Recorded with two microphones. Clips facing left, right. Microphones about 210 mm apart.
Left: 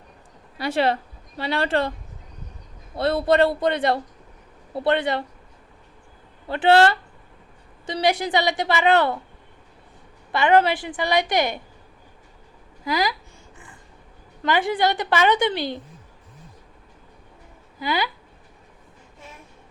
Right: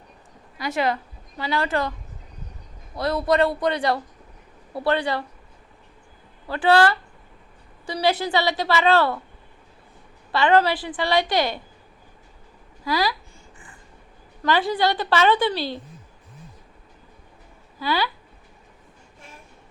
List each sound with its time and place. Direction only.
0.6 s a woman's voice: 30° left (ahead or behind)
2.9 s a woman's voice: 30° left (ahead or behind)
6.5 s a woman's voice: 25° left (ahead or behind)
10.3 s a woman's voice: 20° left (ahead or behind)
12.8 s speech: 20° left (ahead or behind)
14.4 s a woman's voice: 20° left (ahead or behind)
17.7 s a woman's voice: 15° left (ahead or behind)